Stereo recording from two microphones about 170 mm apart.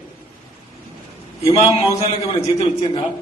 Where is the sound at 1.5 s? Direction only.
30° left (ahead or behind).